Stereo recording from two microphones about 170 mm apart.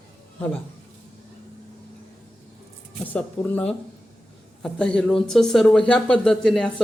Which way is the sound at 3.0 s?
10° left (ahead or behind).